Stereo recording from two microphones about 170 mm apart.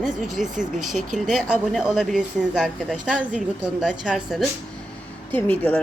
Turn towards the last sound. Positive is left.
turn(degrees=10)  # may be behind; listen again after turning